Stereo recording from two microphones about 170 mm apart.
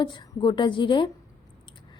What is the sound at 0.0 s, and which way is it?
A woman's voice, 30° left (ahead or behind).